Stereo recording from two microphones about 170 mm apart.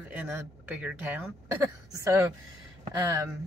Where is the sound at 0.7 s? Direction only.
10° right (ahead or behind).